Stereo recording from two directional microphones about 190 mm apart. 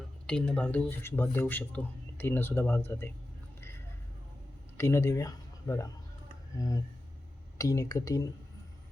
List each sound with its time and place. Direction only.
0.3 s speech: 5° left (ahead or behind)
4.8 s speech: 15° left (ahead or behind)